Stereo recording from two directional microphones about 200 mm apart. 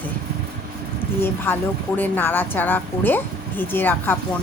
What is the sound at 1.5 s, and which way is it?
Speech, 10° left (ahead or behind).